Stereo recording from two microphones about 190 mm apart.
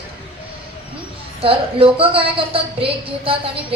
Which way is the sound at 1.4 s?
30° right (ahead or behind).